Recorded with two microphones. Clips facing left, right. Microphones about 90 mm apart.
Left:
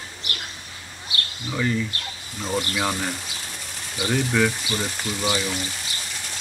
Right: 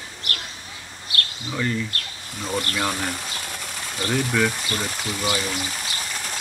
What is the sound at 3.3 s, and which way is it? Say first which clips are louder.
Pigeon: right 4 dB; 65° right (ahead or behind).